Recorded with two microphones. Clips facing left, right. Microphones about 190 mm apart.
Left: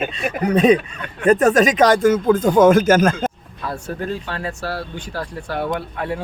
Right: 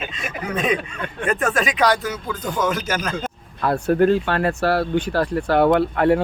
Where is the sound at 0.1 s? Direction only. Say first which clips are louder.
Left 8 dB; 35° left (ahead or behind).